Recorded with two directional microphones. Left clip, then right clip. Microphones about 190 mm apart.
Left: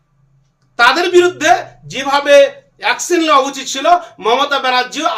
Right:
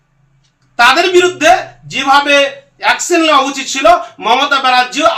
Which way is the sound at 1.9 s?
30° left (ahead or behind).